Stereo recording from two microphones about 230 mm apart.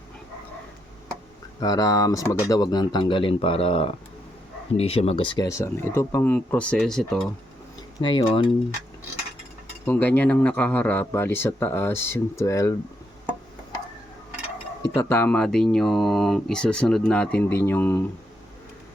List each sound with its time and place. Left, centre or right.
1.6 s speech: centre
7.9 s speech: centre
9.8 s speech: centre
14.9 s speech: centre